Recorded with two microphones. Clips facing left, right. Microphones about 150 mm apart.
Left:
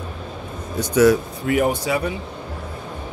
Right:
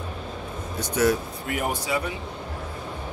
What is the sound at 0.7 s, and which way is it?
Speech, 90° left.